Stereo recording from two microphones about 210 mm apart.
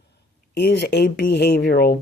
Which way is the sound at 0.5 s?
50° left (ahead or behind).